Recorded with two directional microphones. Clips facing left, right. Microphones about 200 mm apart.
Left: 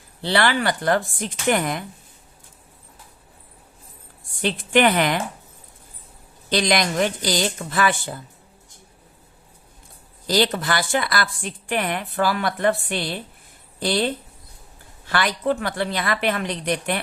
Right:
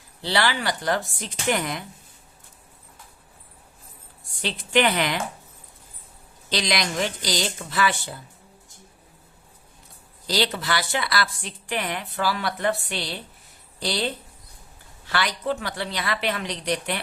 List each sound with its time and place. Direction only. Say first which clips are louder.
0.2 s speech: left 4 dB; 55° left (ahead or behind)
4.4 s a woman's voice: left 4 dB; 50° left (ahead or behind)
6.5 s a woman's voice: left 5 dB; 50° left (ahead or behind)
10.2 s a woman's voice: left 4 dB; 50° left (ahead or behind)